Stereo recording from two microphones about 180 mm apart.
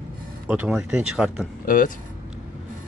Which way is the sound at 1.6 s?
50° left (ahead or behind).